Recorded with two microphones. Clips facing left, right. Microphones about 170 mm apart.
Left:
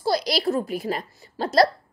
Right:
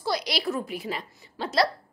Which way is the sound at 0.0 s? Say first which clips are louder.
Left 5 dB; 35° left (ahead or behind).